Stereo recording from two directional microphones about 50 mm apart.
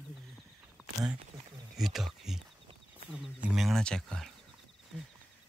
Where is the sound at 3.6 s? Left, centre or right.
Centre.